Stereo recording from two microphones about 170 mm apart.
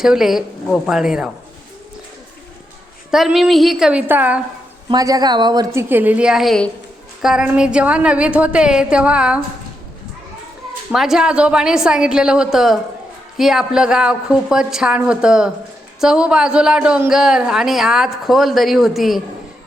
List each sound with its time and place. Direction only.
0.0 s a woman's voice: centre (ahead or behind)
3.1 s a woman's voice: centre (ahead or behind)
4.9 s a woman's voice: 20° right (ahead or behind)
5.9 s a woman's voice: 10° right (ahead or behind)
10.9 s a woman's voice: centre (ahead or behind)